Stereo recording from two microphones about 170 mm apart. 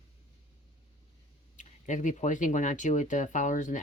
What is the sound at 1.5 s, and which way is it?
Speech, 50° left (ahead or behind).